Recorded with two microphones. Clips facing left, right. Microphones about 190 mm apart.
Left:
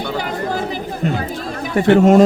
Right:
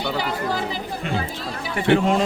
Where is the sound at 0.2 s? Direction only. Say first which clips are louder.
Left 3 dB; 45° left (ahead or behind).